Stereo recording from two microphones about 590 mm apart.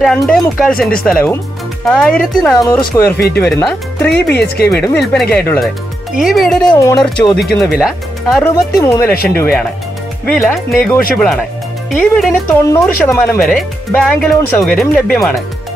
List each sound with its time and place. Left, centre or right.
0.0 s speech: centre
4.1 s speech: centre
4.6 s speech: centre
10.2 s speech: centre